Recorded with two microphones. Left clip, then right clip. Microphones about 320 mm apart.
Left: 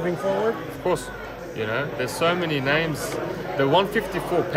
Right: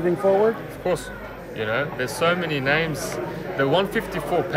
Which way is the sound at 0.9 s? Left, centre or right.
Centre.